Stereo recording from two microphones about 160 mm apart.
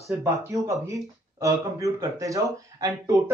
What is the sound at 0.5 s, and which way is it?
Speech, 20° right (ahead or behind).